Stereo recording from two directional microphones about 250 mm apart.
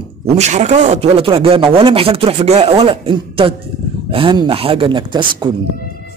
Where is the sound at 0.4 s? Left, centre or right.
Right.